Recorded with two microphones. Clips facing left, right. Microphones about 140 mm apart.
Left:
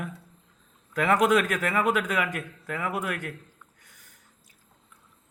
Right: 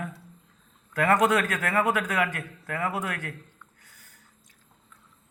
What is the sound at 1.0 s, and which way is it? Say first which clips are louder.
Speech: even; 15° left (ahead or behind).